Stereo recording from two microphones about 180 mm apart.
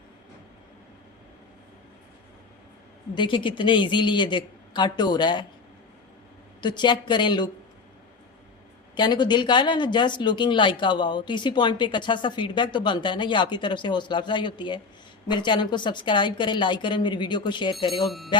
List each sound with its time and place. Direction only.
3.2 s speech: 30° left (ahead or behind)
6.6 s speech: 25° left (ahead or behind)
9.0 s speech: 25° left (ahead or behind)